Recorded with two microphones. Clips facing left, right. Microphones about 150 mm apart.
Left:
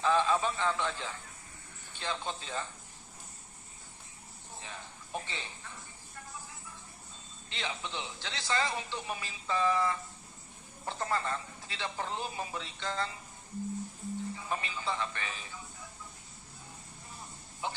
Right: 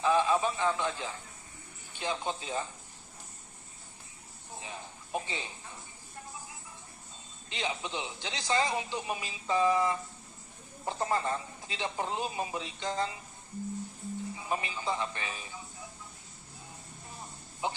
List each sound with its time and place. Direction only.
0.0 s a man's voice: 15° right (ahead or behind)
4.6 s a sound: 15° right (ahead or behind)
7.5 s a man's voice: 15° right (ahead or behind)
14.3 s a man's voice: 15° right (ahead or behind)
17.6 s a man's voice: 20° right (ahead or behind)